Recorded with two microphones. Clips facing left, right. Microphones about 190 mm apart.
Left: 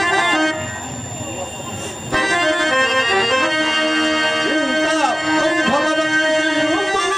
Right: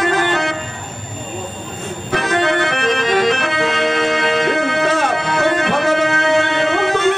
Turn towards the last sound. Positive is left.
turn(degrees=-60)  # may be behind; listen again after turning